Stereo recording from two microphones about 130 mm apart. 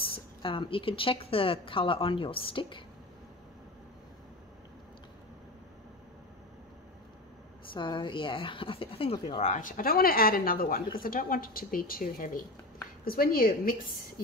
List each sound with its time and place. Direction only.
0.4 s speech: 40° left (ahead or behind)
7.7 s speech: 40° left (ahead or behind)
9.4 s speech: 80° left